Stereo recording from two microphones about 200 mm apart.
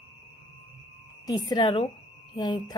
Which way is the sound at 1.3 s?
20° left (ahead or behind).